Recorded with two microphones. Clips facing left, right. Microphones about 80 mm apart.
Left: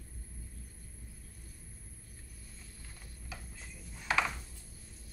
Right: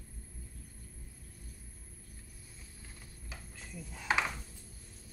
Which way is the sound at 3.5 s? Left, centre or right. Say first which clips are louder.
Right 4 dB; right.